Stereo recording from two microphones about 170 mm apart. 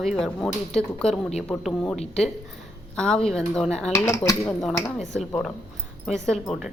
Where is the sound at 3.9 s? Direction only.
15° left (ahead or behind).